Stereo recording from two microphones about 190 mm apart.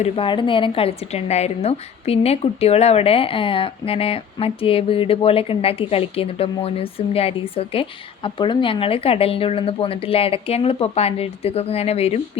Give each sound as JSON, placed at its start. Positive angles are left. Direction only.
{"t": 0.0, "sound": "a woman's voice", "side_deg": 25}